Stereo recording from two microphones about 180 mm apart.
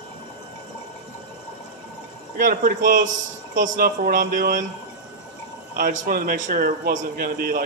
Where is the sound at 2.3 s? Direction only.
50° right (ahead or behind).